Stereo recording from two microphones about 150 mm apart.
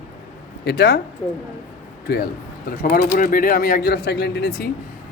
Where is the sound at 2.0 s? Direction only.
90° left.